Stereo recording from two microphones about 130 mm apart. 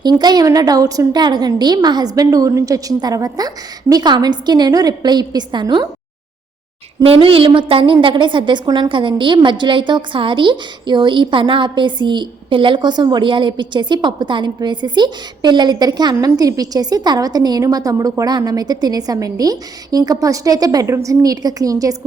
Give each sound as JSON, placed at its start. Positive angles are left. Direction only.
{"t": 0.0, "sound": "a woman's voice", "side_deg": -35}
{"t": 7.0, "sound": "a woman's voice", "side_deg": -45}